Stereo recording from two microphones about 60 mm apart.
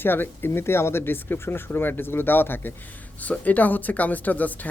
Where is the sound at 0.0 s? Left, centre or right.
Left.